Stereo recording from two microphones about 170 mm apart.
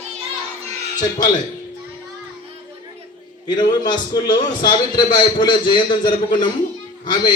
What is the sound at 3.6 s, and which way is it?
A man's voice, 25° left (ahead or behind).